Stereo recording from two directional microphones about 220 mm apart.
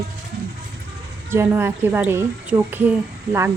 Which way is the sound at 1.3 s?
10° right (ahead or behind).